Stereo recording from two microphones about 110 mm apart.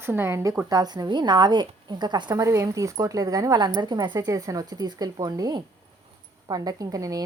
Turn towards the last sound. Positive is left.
turn(degrees=-35)  # may be behind; listen again after turning